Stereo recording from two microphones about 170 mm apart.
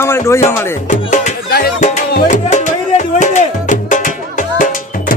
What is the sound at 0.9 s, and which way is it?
Music, 45° left (ahead or behind).